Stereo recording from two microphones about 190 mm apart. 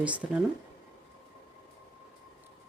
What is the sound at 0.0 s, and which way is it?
Speech, 5° right (ahead or behind).